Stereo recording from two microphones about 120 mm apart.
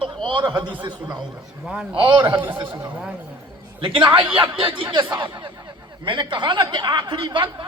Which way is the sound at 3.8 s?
45° right (ahead or behind).